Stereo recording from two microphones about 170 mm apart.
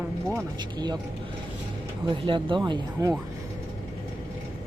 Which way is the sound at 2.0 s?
30° right (ahead or behind).